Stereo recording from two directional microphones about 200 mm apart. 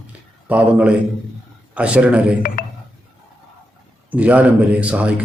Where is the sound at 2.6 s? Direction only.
45° left (ahead or behind).